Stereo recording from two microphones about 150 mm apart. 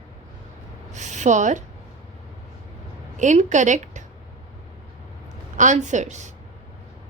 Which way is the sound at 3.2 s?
55° right (ahead or behind).